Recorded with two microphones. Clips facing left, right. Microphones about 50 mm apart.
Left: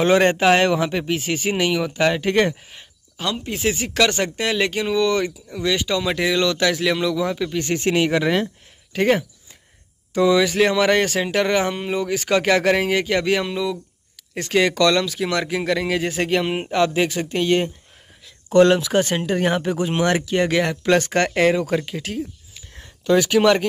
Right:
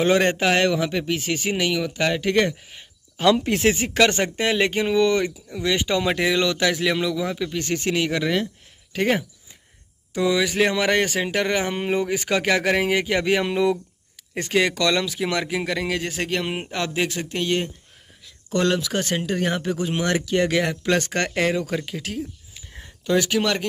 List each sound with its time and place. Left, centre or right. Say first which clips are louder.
0.4 s speech: left 3 dB; centre
3.2 s speech: right 6 dB; right
5.2 s speech: left 1 dB; centre
5.8 s speech: even; right
6.1 s speech: left 1 dB; centre
7.8 s speech: left 5 dB; left
8.9 s speech: left 3 dB; centre
11.7 s speech: even; right
12.3 s speech: left 5 dB; centre
13.5 s speech: right 3 dB; right
14.5 s speech: left 3 dB; centre
18.5 s speech: left 7 dB; left; by 22.2 s centre
22.5 s a sound: even; centre
23.1 s speech: left 4 dB; centre